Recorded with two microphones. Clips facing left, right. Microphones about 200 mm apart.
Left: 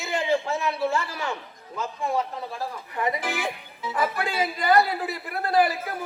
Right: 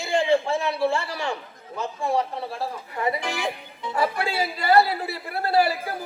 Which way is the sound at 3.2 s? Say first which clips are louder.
Right 1 dB; 5° left (ahead or behind).